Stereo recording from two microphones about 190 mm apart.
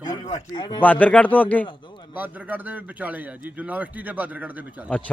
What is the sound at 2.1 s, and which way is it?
A man's voice, 10° right (ahead or behind).